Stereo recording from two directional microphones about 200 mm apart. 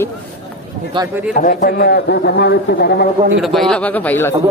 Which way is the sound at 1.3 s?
40° left (ahead or behind).